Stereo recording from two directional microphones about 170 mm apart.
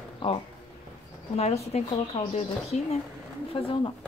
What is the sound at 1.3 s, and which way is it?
Speech, 40° left (ahead or behind).